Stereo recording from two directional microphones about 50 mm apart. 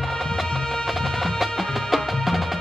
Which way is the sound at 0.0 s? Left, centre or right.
Centre.